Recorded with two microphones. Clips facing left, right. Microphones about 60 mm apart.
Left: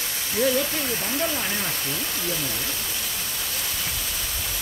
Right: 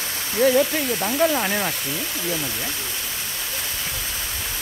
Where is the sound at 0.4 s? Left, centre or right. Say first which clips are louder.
Right 5 dB; right.